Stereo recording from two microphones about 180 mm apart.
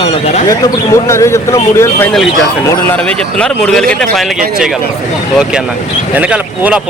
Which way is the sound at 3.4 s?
5° left (ahead or behind).